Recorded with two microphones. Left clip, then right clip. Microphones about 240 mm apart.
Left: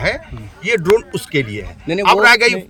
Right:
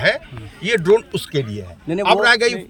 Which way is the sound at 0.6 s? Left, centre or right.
Centre.